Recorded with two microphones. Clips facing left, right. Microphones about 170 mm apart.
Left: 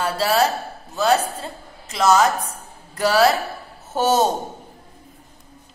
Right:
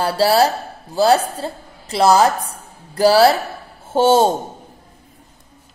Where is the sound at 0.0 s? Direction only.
30° right (ahead or behind).